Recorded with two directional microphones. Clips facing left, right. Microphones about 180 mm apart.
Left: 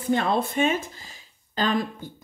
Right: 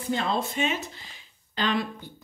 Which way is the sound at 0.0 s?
55° left (ahead or behind).